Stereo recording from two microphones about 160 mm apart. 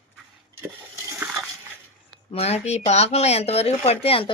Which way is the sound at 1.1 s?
15° right (ahead or behind).